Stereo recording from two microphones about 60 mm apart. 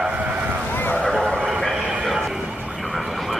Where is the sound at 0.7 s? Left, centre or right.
Left.